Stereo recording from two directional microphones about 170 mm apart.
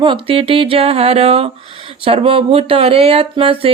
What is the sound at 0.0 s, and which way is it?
Speech, 30° right (ahead or behind).